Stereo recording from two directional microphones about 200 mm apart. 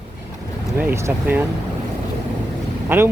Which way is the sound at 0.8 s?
15° right (ahead or behind).